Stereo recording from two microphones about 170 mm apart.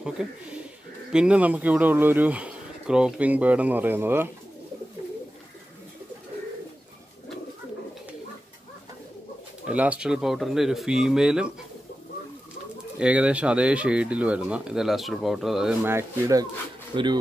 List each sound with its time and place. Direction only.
0.2 s speech: 5° right (ahead or behind)
9.7 s speech: 5° right (ahead or behind)
13.0 s speech: 5° right (ahead or behind)
15.9 s speech: 15° right (ahead or behind)